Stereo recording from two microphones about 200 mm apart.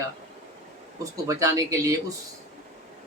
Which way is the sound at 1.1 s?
15° right (ahead or behind).